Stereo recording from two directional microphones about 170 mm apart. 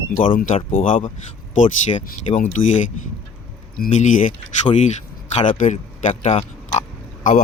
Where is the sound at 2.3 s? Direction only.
45° left (ahead or behind).